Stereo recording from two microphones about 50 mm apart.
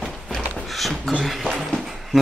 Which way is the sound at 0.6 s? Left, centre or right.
Centre.